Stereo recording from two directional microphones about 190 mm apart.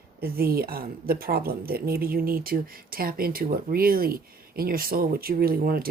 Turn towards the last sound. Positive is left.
turn(degrees=-50)  # may be behind; listen again after turning